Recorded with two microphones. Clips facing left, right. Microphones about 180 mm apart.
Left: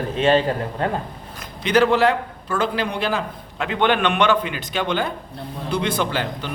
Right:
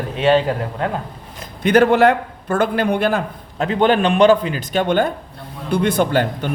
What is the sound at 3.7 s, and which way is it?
A man's voice, 35° right (ahead or behind).